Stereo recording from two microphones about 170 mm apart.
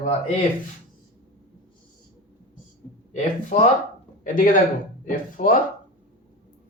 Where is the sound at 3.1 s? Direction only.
45° left (ahead or behind).